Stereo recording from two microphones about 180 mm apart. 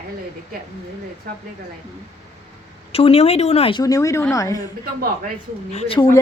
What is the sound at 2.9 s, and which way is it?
Speech, 35° left (ahead or behind).